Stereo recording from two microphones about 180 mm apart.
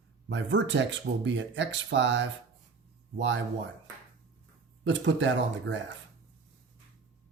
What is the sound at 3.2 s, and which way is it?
Speech, 90° right.